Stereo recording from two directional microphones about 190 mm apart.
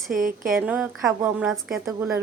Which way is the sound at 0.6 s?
5° right (ahead or behind).